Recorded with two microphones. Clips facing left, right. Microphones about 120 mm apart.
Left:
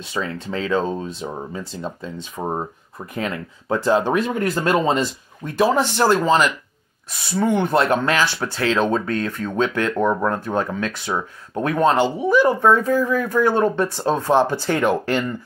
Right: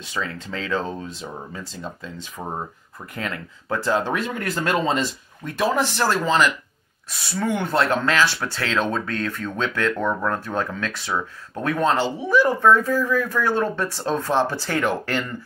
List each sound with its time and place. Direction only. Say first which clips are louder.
0.1 s speech: left 4 dB; 25° left (ahead or behind)
7.3 s speech: left 4 dB; 20° left (ahead or behind)